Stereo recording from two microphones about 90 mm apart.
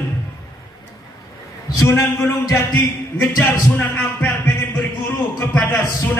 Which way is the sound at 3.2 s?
20° left (ahead or behind).